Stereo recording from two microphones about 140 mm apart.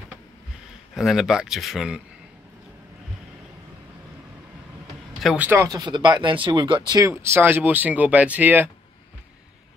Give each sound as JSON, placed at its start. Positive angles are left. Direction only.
{"t": 0.9, "sound": "speech", "side_deg": 0}
{"t": 5.2, "sound": "speech", "side_deg": -5}
{"t": 5.5, "sound": "speech", "side_deg": -25}
{"t": 7.1, "sound": "speech", "side_deg": -15}